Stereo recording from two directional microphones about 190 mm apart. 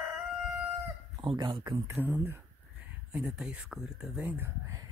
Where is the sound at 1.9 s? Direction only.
10° right (ahead or behind).